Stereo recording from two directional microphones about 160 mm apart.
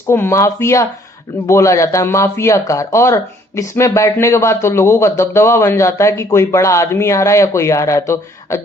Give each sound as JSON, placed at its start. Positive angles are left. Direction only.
{"t": 0.1, "sound": "speech", "side_deg": 15}